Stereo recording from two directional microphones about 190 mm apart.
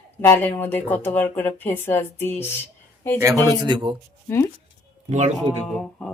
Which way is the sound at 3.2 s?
20° right (ahead or behind).